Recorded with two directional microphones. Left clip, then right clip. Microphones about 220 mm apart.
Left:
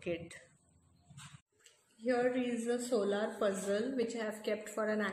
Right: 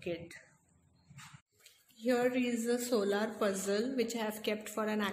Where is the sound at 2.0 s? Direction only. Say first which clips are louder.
Right 1 dB; 45° right (ahead or behind).